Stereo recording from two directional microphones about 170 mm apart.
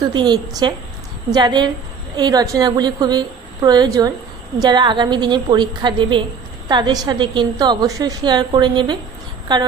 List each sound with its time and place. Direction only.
0.0 s a woman's voice: 25° right (ahead or behind)